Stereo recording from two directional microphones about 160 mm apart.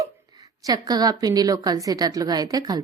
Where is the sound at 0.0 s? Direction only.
20° right (ahead or behind).